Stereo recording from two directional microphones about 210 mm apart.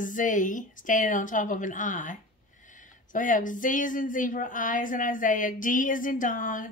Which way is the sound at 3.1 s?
40° left (ahead or behind).